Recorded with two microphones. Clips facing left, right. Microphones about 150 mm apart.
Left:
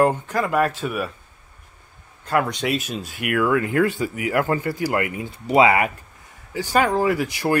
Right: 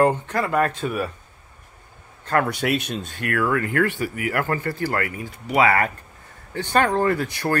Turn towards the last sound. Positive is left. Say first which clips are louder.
# left 1 dB
turn(degrees=10)  # may be behind; listen again after turning